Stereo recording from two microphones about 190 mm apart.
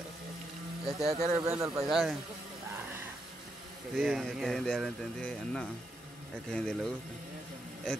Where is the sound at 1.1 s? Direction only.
35° right (ahead or behind).